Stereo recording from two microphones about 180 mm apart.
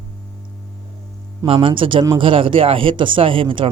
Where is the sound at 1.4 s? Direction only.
30° right (ahead or behind).